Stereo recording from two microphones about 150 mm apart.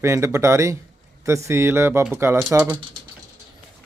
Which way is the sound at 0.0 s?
20° right (ahead or behind).